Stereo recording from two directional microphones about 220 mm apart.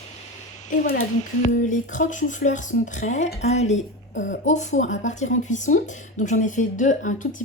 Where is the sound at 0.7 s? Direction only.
40° left (ahead or behind).